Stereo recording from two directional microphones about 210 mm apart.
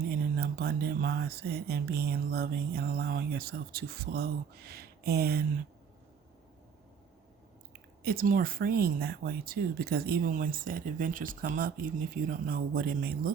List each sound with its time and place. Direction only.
0.1 s speech: 45° right (ahead or behind)
8.0 s speech: 45° right (ahead or behind)